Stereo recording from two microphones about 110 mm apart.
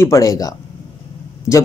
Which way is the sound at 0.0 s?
30° left (ahead or behind).